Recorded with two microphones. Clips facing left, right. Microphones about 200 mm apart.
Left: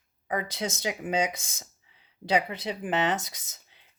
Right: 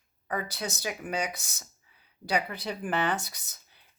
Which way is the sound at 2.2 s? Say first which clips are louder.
Left 3 dB; 25° left (ahead or behind).